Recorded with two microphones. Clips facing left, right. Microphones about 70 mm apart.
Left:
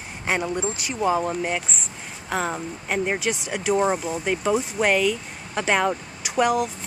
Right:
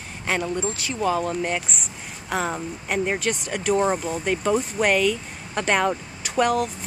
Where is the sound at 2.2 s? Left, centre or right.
Centre.